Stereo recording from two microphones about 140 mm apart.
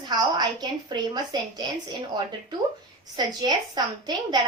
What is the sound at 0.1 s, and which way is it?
A woman's voice, 30° right (ahead or behind).